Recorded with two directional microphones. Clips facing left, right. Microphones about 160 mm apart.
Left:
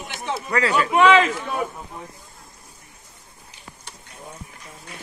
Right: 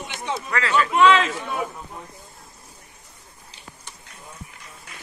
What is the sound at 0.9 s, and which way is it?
Speech, 60° left (ahead or behind).